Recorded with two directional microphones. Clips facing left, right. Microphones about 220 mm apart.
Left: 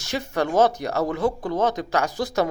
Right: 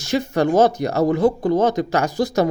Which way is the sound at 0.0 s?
40° right (ahead or behind).